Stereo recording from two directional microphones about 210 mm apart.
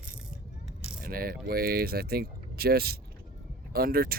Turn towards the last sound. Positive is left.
turn(degrees=-45)  # may be behind; listen again after turning